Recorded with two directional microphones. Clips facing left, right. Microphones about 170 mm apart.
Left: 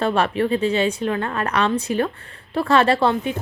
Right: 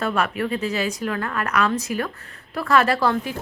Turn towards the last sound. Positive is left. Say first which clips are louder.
# left 3 dB
turn(degrees=25)  # may be behind; listen again after turning